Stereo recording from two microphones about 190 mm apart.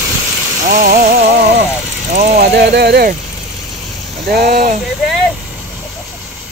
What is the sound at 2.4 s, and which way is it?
Speech, 60° right (ahead or behind).